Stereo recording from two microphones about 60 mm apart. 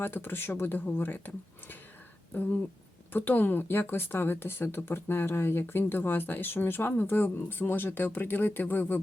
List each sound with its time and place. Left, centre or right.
0.0 s speech: left